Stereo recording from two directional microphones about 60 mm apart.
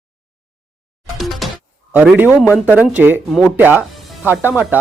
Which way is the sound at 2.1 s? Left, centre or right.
Right.